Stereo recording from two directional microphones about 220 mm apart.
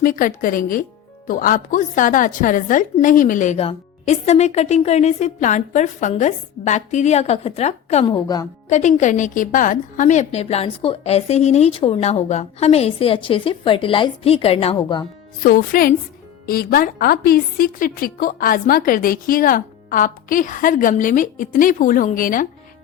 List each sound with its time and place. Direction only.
0.0 s a woman's voice: 40° left (ahead or behind); by 8.4 s 20° left (ahead or behind)
8.7 s a woman's voice: 35° left (ahead or behind)
15.4 s a woman's voice: 40° left (ahead or behind)